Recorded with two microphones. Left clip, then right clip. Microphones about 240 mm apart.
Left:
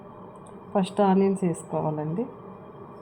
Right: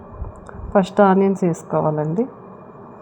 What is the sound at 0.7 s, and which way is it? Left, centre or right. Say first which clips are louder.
A woman's voice: right 8 dB; centre.